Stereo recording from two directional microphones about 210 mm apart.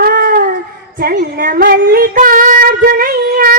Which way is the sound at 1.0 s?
45° right (ahead or behind).